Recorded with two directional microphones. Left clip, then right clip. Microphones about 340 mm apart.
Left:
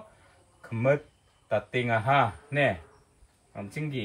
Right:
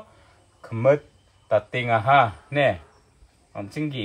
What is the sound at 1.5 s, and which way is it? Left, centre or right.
Speech, centre.